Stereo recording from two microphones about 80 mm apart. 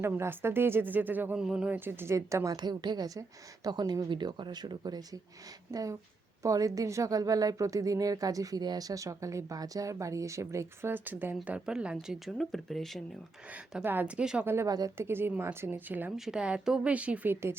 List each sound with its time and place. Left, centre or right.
0.0 s speech: right
1.4 s speech: centre; by 2.6 s right
2.6 s speech: right
4.1 s speech: right
5.7 s speech: right
10.9 s speech: right
11.4 s speech: centre
12.2 s speech: centre
13.8 s speech: right
14.2 s speech: centre
14.4 s a woman's voice: right
14.7 s speech: right
14.9 s a woman's voice: right
16.1 s speech: centre